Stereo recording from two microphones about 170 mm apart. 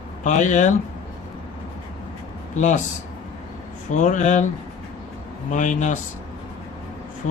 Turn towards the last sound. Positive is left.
turn(degrees=45)  # may be behind; listen again after turning